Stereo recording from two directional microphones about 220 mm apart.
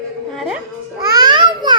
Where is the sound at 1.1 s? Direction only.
20° right (ahead or behind).